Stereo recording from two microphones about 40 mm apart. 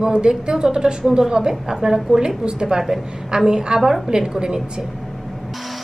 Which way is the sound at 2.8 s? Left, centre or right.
Centre.